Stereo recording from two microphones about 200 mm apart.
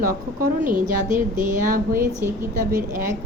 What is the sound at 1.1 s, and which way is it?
Speech, 15° right (ahead or behind).